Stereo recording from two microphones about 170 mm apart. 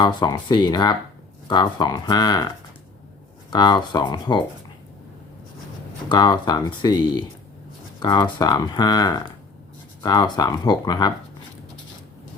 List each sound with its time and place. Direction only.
0.0 s speech: 25° left (ahead or behind)
3.5 s speech: 25° left (ahead or behind)
6.1 s speech: 25° left (ahead or behind)